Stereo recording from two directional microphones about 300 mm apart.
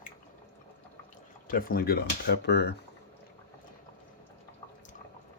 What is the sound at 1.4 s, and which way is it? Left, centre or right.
Speech, left.